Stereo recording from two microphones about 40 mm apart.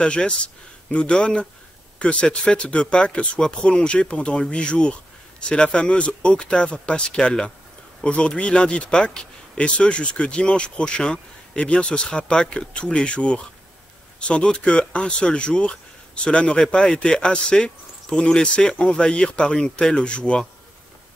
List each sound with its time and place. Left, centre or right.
0.0 s speech: left